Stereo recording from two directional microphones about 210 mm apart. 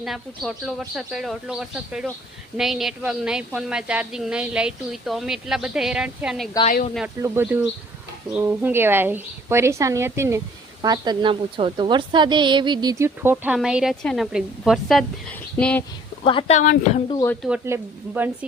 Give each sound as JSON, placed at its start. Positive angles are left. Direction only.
{"t": 0.0, "sound": "a woman's voice", "side_deg": 0}
{"t": 16.2, "sound": "speech", "side_deg": 25}
{"t": 17.1, "sound": "speech", "side_deg": 15}
{"t": 17.7, "sound": "a woman's voice", "side_deg": -10}